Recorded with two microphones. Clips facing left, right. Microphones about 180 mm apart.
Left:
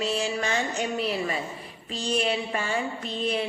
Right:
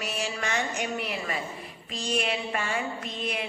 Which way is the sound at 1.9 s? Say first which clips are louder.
Left 3 dB; 35° left (ahead or behind).